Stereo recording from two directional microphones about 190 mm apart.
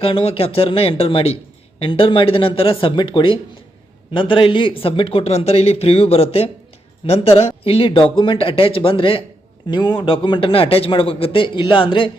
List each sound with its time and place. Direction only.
0.0 s a man's voice: 30° left (ahead or behind)